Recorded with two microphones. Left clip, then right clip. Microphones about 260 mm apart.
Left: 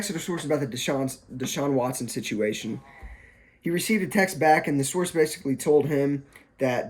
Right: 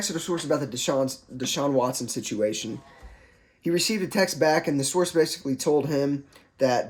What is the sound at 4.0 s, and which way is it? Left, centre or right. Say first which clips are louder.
Speech: left 2 dB; centre.